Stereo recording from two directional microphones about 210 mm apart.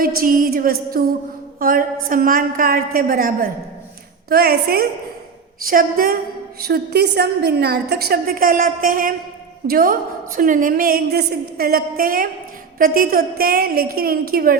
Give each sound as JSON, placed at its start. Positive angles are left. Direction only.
{"t": 0.2, "sound": "a woman's voice", "side_deg": -40}